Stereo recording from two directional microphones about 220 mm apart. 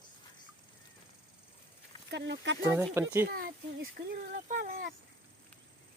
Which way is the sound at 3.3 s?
45° right (ahead or behind).